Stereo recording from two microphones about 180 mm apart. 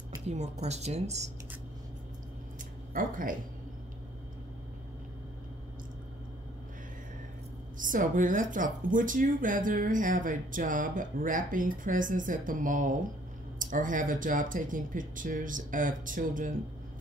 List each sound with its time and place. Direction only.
0.3 s a woman's voice: 40° right (ahead or behind)
2.9 s a woman's voice: 50° right (ahead or behind)
7.7 s a woman's voice: 45° right (ahead or behind)